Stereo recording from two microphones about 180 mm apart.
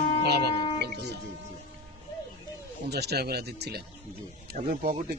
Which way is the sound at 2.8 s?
65° right (ahead or behind).